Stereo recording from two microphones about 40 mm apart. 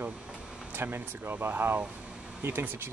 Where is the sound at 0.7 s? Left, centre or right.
Right.